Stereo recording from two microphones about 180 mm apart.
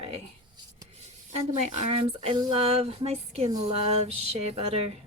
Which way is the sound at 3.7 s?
35° right (ahead or behind).